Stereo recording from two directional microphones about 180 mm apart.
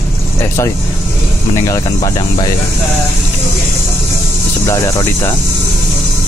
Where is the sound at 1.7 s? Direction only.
20° left (ahead or behind).